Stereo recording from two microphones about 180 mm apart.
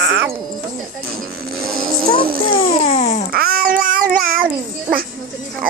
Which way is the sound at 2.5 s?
40° left (ahead or behind).